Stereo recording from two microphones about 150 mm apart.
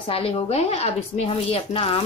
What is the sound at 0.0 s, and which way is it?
A woman's voice, 40° left (ahead or behind).